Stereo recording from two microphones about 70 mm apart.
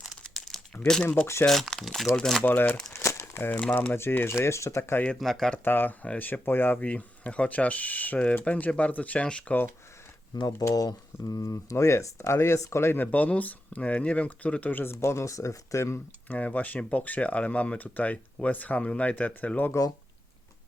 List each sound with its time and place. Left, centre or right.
0.3 s crumpling: centre
1.5 s speech: centre
2.4 s speech: left
2.9 s crumpling: left
3.9 s speech: left
5.2 s speech: centre
5.6 s speech: left
10.6 s speech: left
10.8 s speech: left
13.1 s speech: left
15.0 s speech: left
16.3 s speech: left